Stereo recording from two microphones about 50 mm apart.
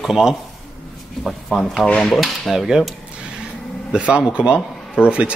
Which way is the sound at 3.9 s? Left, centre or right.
Centre.